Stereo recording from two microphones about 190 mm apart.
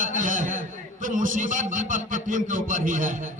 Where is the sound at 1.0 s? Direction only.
45° right (ahead or behind).